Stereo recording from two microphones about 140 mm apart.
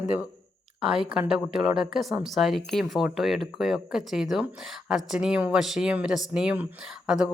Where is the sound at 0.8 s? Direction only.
5° right (ahead or behind).